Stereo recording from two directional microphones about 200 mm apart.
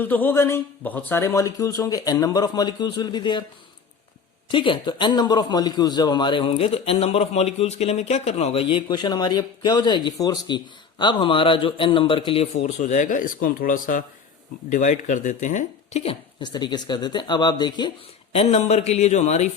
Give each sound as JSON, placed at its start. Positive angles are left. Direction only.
{"t": 0.0, "sound": "speech", "side_deg": 10}
{"t": 4.5, "sound": "a man's voice", "side_deg": 25}
{"t": 12.6, "sound": "speech", "side_deg": 40}
{"t": 16.4, "sound": "a man's voice", "side_deg": 20}
{"t": 18.3, "sound": "speech", "side_deg": 30}